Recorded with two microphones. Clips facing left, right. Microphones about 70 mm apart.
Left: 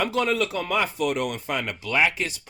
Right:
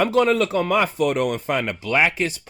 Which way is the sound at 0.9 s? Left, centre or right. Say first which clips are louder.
Right 5 dB; right.